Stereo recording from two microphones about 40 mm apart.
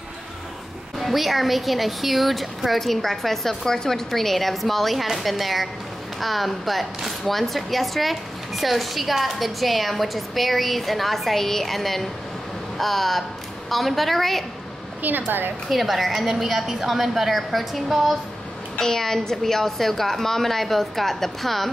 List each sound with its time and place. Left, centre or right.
0.9 s speech: centre
15.0 s speech: right
15.7 s speech: centre
18.8 s a woman's voice: centre